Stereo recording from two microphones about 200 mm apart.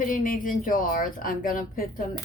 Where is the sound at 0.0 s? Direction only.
45° left (ahead or behind).